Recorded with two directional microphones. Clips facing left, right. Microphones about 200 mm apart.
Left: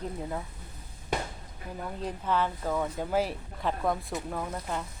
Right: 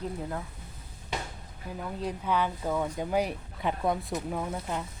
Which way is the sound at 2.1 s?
10° right (ahead or behind).